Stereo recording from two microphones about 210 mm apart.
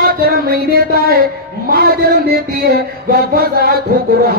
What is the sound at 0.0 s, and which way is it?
Music, 45° right (ahead or behind).